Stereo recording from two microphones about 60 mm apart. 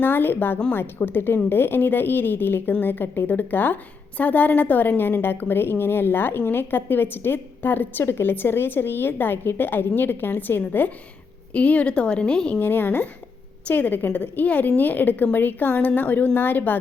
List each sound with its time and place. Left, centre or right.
0.0 s a woman's voice: left; by 12.5 s centre
12.5 s a woman's voice: left